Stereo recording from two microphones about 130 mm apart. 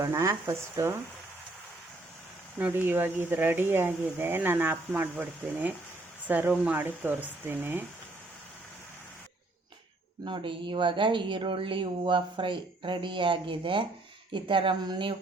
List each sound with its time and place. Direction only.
0.0 s speech: 20° right (ahead or behind)
2.6 s speech: 15° right (ahead or behind)
10.2 s speech: 40° right (ahead or behind)